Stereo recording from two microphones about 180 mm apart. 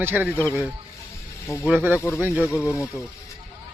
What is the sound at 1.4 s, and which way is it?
Speech, 10° left (ahead or behind).